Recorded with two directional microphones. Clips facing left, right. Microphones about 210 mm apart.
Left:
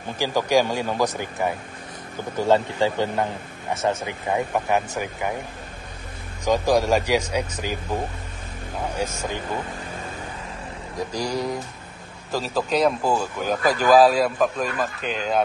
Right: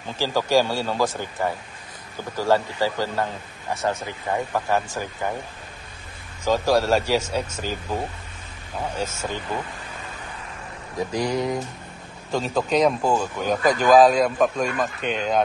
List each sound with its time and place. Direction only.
0.2 s a man's voice: 15° left (ahead or behind)
6.4 s speech: 15° left (ahead or behind)
11.0 s a man's voice: centre (ahead or behind)